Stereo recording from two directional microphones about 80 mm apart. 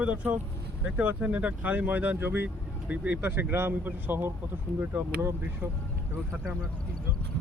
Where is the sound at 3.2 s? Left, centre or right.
Right.